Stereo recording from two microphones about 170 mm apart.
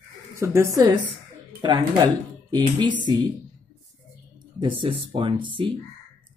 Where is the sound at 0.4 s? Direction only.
15° right (ahead or behind).